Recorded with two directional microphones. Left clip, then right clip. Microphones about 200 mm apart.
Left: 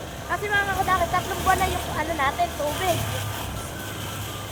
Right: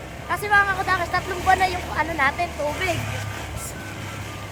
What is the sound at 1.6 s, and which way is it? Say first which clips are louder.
Speech: right 3 dB; 15° right (ahead or behind).